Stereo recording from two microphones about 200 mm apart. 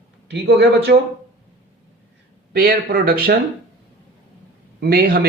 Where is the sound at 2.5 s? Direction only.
50° right (ahead or behind).